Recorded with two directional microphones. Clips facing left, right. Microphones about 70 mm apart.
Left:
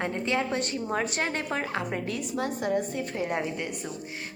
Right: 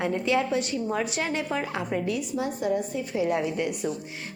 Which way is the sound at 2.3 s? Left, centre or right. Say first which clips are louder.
Even; left.